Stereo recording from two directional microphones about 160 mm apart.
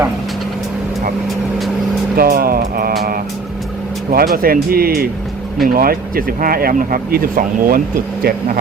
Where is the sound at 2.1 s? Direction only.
65° right (ahead or behind).